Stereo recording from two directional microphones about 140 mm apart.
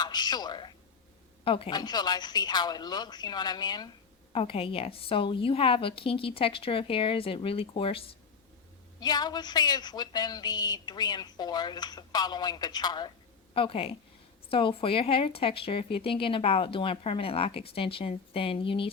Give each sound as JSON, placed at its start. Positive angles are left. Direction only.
{"t": 0.0, "sound": "a woman's voice", "side_deg": 30}
{"t": 4.3, "sound": "speech", "side_deg": 40}
{"t": 9.0, "sound": "a woman's voice", "side_deg": 30}
{"t": 13.5, "sound": "a woman's voice", "side_deg": 40}